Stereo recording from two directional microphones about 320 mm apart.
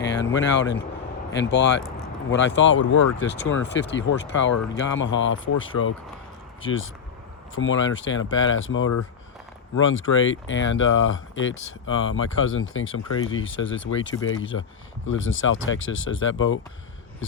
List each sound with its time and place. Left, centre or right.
0.0 s speech: left
5.7 s speech: left
6.6 s speech: left